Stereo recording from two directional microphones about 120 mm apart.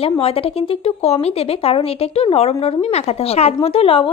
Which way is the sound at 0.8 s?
60° left (ahead or behind).